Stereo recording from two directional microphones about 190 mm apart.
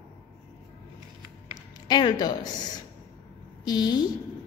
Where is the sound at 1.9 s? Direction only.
25° left (ahead or behind).